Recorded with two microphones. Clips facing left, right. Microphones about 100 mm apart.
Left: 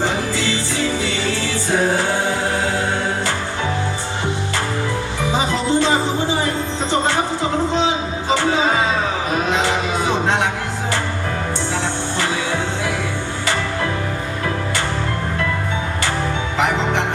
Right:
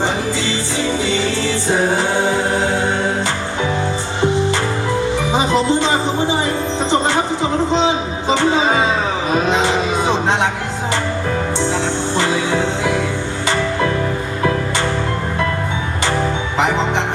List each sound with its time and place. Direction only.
0.0 s music: 20° right (ahead or behind)
5.3 s music: 20° right (ahead or behind)
8.3 s music: 20° right (ahead or behind)
9.3 s cattle: 20° right (ahead or behind)
11.7 s music: 20° right (ahead or behind)
16.6 s music: 20° right (ahead or behind)